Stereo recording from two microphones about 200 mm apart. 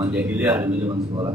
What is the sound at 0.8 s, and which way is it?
Speech, 25° right (ahead or behind).